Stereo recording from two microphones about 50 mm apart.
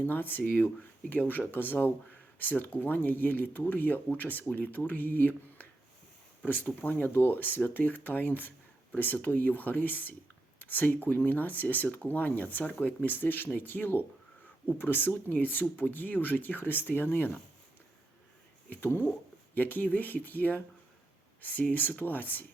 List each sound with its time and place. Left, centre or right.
0.0 s speech: left
7.1 s speech: left
18.7 s speech: left